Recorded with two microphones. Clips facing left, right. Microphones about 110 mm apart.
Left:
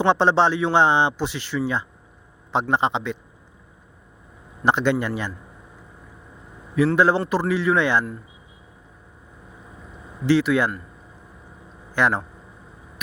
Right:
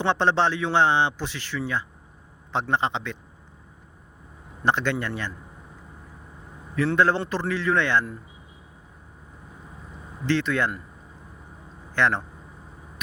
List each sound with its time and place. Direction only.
0.0 s a man's voice: 15° left (ahead or behind)
4.6 s a man's voice: 15° left (ahead or behind)
6.7 s a man's voice: 15° left (ahead or behind)
10.2 s a man's voice: 10° left (ahead or behind)
11.9 s a man's voice: 15° left (ahead or behind)